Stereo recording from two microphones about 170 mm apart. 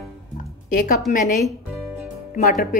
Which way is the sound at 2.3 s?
55° left (ahead or behind).